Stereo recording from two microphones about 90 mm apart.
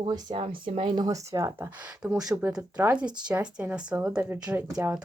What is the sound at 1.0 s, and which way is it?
Speech, 35° right (ahead or behind).